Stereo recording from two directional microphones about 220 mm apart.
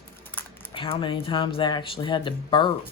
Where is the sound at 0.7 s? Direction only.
25° left (ahead or behind).